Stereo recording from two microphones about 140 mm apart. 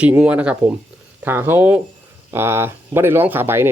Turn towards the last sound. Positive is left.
turn(degrees=-15)  # may be behind; listen again after turning